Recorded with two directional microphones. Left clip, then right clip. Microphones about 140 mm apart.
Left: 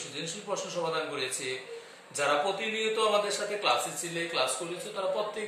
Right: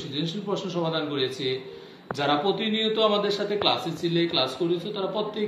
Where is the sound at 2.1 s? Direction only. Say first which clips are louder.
Right 3 dB; 25° left (ahead or behind).